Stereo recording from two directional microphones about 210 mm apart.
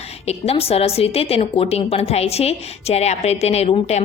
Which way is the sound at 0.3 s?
30° left (ahead or behind).